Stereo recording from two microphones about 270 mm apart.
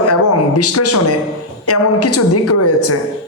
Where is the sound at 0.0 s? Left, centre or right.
Left.